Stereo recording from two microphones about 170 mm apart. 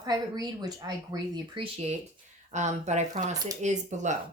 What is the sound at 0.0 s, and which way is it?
Speech, 20° right (ahead or behind).